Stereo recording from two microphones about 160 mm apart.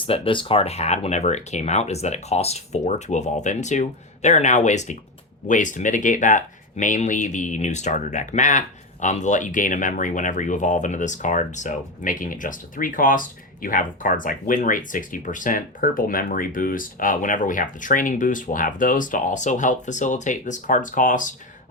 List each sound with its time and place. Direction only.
0.0 s speech: 30° left (ahead or behind); by 21.3 s 55° left (ahead or behind)